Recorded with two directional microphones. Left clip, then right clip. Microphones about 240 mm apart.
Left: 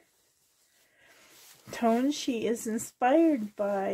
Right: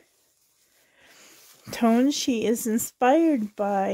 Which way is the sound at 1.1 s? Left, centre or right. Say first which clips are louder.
Right 3 dB; right.